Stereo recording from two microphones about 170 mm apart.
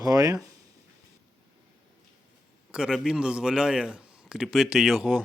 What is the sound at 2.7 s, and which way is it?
A man's voice, 5° right (ahead or behind).